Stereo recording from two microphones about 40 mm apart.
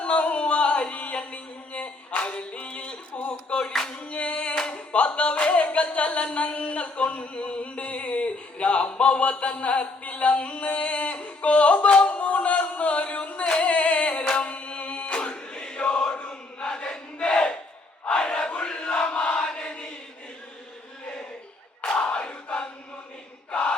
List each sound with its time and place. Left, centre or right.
0.0 s music: left
4.0 s singing: left
4.5 s music: left
18.2 s crowd: left
19.5 s chant: left
21.8 s battle cry: left
23.5 s a sound: left